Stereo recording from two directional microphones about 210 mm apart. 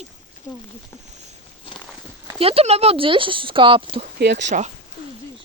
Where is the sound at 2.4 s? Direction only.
30° right (ahead or behind).